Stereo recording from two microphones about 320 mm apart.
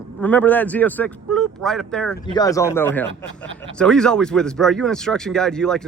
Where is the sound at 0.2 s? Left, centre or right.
Centre.